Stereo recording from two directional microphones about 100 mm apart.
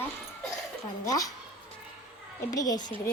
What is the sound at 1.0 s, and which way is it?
Speech, 35° left (ahead or behind).